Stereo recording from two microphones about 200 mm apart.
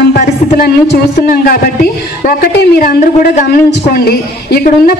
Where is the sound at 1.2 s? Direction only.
45° left (ahead or behind).